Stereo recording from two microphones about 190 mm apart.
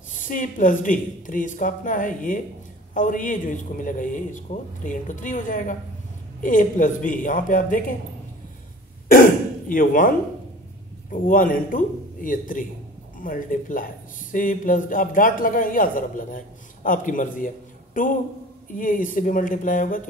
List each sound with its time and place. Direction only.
0.1 s a man's voice: 45° left (ahead or behind)
9.1 s throat clearing: 45° left (ahead or behind)
11.1 s a man's voice: 45° left (ahead or behind)